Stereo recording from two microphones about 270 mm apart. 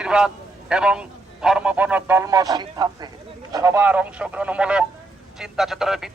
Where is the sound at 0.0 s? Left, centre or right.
Centre.